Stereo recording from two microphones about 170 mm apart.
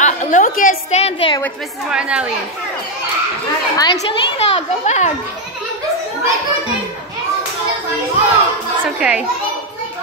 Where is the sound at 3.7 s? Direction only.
20° left (ahead or behind).